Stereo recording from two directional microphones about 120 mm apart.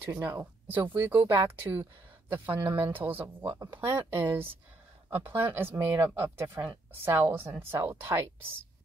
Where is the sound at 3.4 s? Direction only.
40° right (ahead or behind).